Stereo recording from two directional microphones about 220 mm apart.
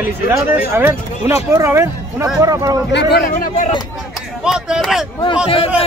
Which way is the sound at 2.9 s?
45° left (ahead or behind).